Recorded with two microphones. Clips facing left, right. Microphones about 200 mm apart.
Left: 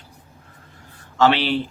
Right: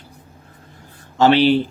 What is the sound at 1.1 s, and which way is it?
Speech, 40° right (ahead or behind).